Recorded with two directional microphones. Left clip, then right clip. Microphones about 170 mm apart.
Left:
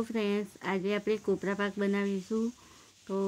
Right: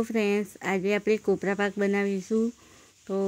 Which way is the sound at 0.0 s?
25° right (ahead or behind).